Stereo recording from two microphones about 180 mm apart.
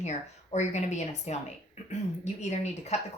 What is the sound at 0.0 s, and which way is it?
Speech, 40° left (ahead or behind).